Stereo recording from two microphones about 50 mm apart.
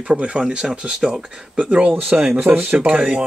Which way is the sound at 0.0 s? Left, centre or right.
Right.